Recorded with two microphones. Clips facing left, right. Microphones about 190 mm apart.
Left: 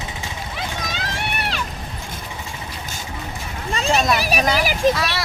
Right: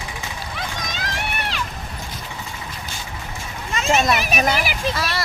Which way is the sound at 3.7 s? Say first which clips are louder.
Even; 35° left (ahead or behind).